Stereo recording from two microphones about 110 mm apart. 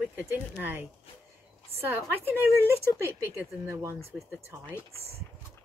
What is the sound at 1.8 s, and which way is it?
Speech, 20° right (ahead or behind).